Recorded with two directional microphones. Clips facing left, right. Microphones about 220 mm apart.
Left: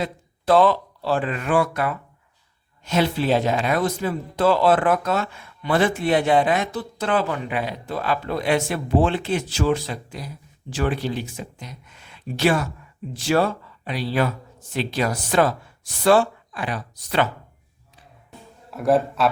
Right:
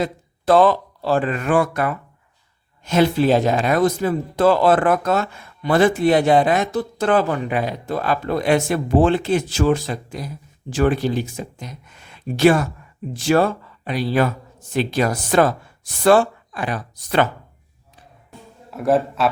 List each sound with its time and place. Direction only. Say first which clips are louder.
0.0 s speech: right 4 dB; 45° right (ahead or behind)
18.7 s a man's voice: right 1 dB; centre (ahead or behind)